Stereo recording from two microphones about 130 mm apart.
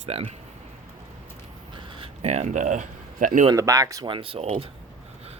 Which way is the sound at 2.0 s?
55° right (ahead or behind).